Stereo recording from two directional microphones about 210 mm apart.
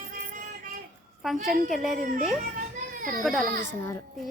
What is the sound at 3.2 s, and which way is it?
Speech, centre (ahead or behind).